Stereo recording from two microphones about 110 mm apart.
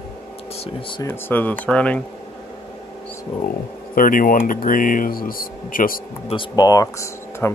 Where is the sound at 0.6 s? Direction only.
55° left (ahead or behind).